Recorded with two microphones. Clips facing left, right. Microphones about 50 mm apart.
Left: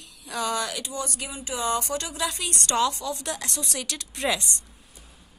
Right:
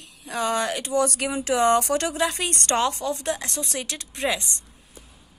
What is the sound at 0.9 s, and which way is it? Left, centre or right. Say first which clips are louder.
Speech: right 10 dB; right.